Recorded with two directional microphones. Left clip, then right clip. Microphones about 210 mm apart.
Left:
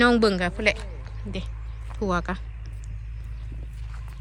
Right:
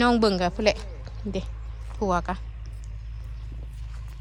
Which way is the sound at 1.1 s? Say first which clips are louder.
Right 5 dB; 20° right (ahead or behind).